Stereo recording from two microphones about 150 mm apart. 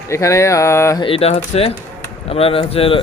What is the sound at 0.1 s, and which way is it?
Speech, 20° left (ahead or behind).